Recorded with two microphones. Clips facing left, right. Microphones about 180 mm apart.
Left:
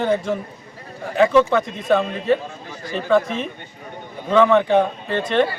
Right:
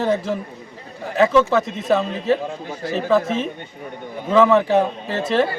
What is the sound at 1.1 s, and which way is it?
A man's voice, centre (ahead or behind).